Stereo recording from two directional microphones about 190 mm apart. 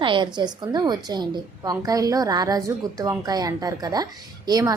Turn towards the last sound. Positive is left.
turn(degrees=-20)  # may be behind; listen again after turning